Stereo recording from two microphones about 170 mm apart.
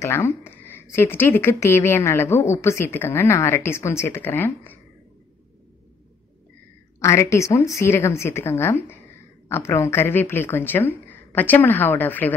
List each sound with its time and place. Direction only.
0.0 s speech: 15° left (ahead or behind)
7.0 s speech: 15° left (ahead or behind)